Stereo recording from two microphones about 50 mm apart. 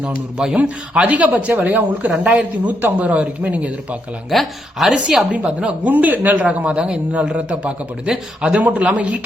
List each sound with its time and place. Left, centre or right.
0.0 s a woman's voice: centre
4.3 s speech: centre
4.9 s a woman's voice: right